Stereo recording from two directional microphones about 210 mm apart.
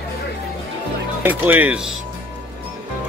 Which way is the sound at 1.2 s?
10° right (ahead or behind).